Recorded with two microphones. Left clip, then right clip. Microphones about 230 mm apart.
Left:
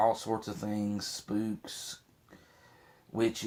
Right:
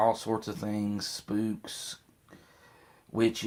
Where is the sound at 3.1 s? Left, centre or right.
Right.